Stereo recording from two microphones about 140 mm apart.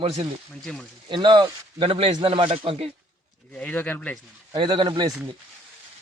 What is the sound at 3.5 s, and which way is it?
Speech, 10° left (ahead or behind).